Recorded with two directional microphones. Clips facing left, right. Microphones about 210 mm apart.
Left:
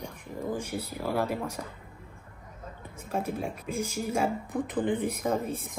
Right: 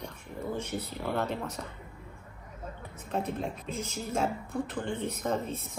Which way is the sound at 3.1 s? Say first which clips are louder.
Left 1 dB; 10° left (ahead or behind).